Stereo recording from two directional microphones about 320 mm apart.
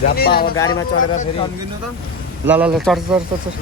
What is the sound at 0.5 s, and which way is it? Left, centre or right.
Speech, centre.